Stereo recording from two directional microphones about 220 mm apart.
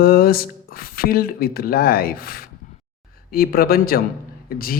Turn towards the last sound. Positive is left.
turn(degrees=40)  # may be behind; listen again after turning